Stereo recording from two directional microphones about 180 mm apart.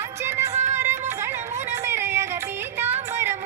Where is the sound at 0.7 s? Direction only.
15° right (ahead or behind).